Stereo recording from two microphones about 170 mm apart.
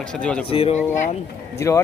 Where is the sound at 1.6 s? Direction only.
20° left (ahead or behind).